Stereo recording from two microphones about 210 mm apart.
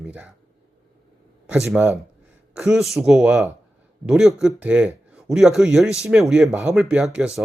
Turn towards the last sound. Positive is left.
turn(degrees=-5)  # may be behind; listen again after turning